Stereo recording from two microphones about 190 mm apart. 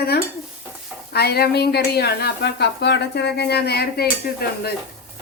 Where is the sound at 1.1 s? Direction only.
55° left (ahead or behind).